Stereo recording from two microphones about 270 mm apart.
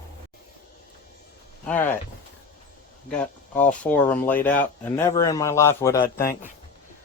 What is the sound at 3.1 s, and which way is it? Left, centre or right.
A man's voice, centre.